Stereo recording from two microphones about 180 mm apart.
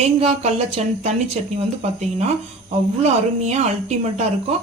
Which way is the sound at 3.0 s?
40° right (ahead or behind).